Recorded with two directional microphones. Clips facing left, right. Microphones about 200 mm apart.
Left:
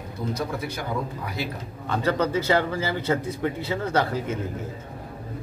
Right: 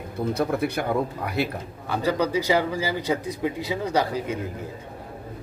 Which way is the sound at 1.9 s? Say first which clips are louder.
Even; 10° right (ahead or behind).